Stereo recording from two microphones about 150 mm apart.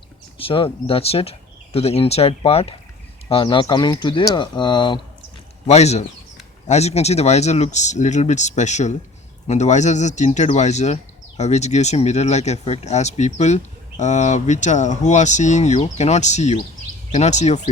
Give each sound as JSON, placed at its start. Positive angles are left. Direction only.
{"t": 0.3, "sound": "speech", "side_deg": 35}
{"t": 5.6, "sound": "speech", "side_deg": 45}